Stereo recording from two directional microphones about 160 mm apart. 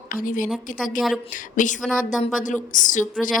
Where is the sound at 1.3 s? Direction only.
50° left (ahead or behind).